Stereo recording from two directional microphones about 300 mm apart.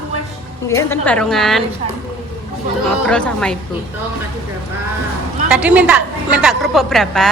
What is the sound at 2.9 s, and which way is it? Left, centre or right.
Speech, centre.